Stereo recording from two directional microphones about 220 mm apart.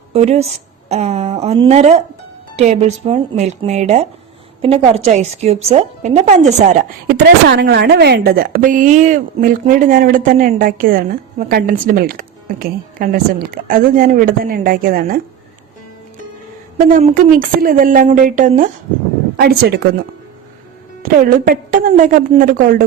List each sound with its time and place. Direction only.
0.1 s a woman's voice: 30° right (ahead or behind)
7.1 s speech: 50° right (ahead or behind)
16.7 s speech: 35° right (ahead or behind)
19.4 s a woman's voice: 45° right (ahead or behind)
21.0 s speech: 40° right (ahead or behind)